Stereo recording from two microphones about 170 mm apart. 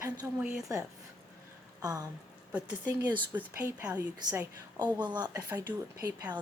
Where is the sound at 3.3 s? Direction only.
10° right (ahead or behind).